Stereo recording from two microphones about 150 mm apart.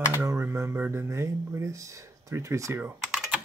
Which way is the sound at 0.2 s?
20° right (ahead or behind).